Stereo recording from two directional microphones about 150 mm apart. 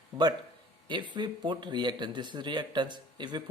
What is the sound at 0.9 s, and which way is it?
Speech, 30° right (ahead or behind).